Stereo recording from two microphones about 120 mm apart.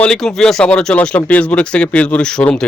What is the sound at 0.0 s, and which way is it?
Speech, 5° left (ahead or behind).